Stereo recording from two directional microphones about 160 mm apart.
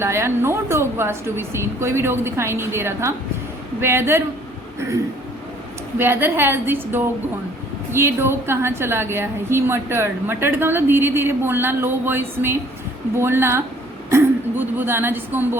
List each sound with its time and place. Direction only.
0.0 s a woman's voice: 15° right (ahead or behind)
6.0 s a woman's voice: 15° right (ahead or behind)